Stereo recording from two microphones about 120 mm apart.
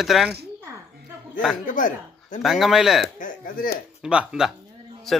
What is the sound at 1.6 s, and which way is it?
Speech, 90° left.